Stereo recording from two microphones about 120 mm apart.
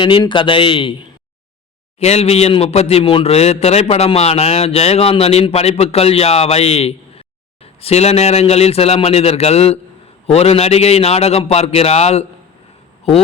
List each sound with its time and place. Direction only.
0.0 s a man's voice: 45° left (ahead or behind)
2.0 s a man's voice: 65° left (ahead or behind)